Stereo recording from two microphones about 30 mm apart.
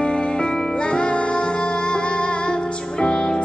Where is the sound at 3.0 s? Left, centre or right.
Left.